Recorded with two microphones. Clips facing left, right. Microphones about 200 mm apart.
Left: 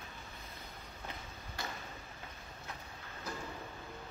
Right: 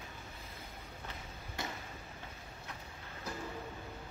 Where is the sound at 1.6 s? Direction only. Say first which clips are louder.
Right 2 dB; 25° right (ahead or behind).